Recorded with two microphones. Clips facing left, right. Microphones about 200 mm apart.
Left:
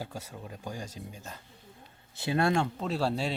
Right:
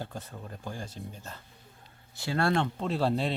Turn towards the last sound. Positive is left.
turn(degrees=5)  # may be behind; listen again after turning